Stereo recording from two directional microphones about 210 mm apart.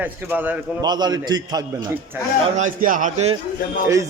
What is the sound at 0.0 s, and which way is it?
Speech, 10° right (ahead or behind).